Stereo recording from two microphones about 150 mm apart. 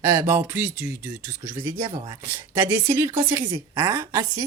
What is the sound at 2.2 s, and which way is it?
A woman's voice, 15° right (ahead or behind).